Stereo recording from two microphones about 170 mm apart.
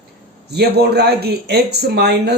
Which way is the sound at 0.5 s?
70° right (ahead or behind).